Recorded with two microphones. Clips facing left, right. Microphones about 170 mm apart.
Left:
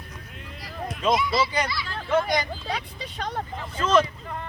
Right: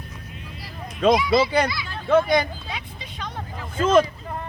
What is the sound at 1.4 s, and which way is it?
Speech, 55° right (ahead or behind).